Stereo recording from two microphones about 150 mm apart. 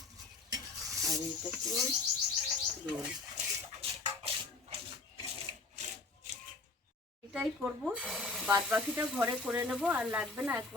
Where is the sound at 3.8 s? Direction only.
40° right (ahead or behind).